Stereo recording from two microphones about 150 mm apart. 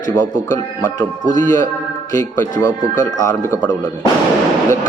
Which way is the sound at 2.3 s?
15° left (ahead or behind).